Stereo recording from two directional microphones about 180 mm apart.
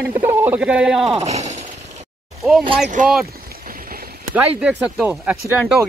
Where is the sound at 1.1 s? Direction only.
35° right (ahead or behind).